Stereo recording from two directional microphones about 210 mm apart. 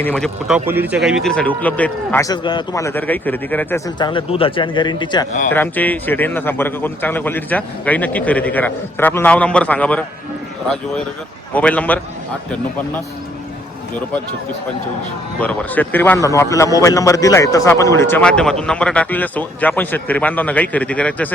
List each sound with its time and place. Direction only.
0.0 s a man's voice: 5° left (ahead or behind)
3.9 s a man's voice: 20° left (ahead or behind)
5.5 s a man's voice: 10° left (ahead or behind)
11.5 s a man's voice: 5° left (ahead or behind)
15.4 s a man's voice: 5° left (ahead or behind)